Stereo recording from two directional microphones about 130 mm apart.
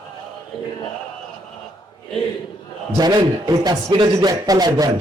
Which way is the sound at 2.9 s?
30° right (ahead or behind).